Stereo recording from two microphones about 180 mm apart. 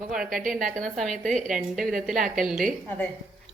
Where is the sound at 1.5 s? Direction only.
Centre (ahead or behind).